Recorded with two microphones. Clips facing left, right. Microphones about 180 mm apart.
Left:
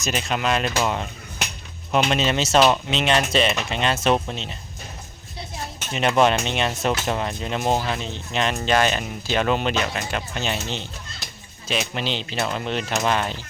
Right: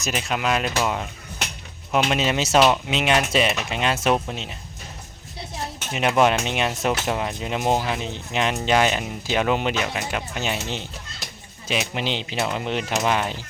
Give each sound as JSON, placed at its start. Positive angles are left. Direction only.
{"t": 0.0, "sound": "speech", "side_deg": -5}
{"t": 5.9, "sound": "speech", "side_deg": -10}